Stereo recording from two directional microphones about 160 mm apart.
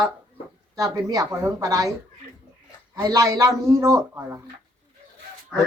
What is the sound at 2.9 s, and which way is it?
A man's voice, 20° right (ahead or behind).